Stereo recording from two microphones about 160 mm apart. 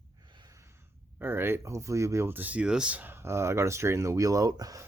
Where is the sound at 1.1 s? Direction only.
15° right (ahead or behind).